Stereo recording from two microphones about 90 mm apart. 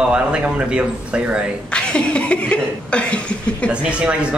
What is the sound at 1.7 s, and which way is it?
Speech, 10° left (ahead or behind).